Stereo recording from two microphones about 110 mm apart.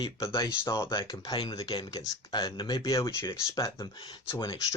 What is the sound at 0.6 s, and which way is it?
Speech, 25° left (ahead or behind).